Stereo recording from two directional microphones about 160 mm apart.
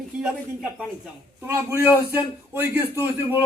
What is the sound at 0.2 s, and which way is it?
Speech, centre (ahead or behind).